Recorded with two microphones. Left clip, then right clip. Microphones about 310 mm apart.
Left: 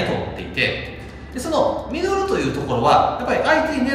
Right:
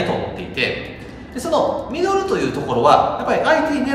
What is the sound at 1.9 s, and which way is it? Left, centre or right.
A man's voice, centre.